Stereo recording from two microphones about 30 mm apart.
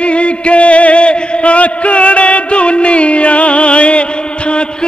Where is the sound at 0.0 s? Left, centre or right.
Left.